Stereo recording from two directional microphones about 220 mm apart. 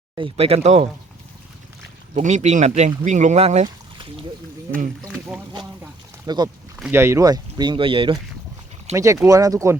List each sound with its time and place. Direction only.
0.2 s speech: 25° right (ahead or behind)
2.1 s speech: 30° right (ahead or behind)
6.2 s speech: 20° right (ahead or behind)
6.7 s speech: 5° right (ahead or behind)